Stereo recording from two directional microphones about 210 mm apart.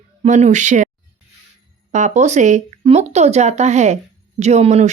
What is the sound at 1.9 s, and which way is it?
Speech, 35° right (ahead or behind).